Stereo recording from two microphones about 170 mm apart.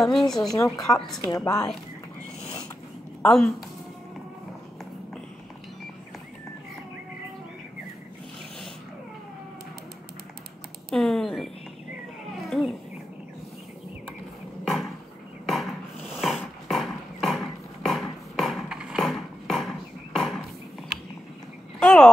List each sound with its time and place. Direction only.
0.0 s speech: centre (ahead or behind)
0.6 s a woman's voice: 20° left (ahead or behind)
0.8 s speech: centre (ahead or behind)
1.3 s speech: 20° left (ahead or behind)
3.3 s speech: centre (ahead or behind)
10.9 s speech: centre (ahead or behind)
12.4 s cat: centre (ahead or behind)
15.4 s dog: centre (ahead or behind)
21.7 s a sound: 5° left (ahead or behind)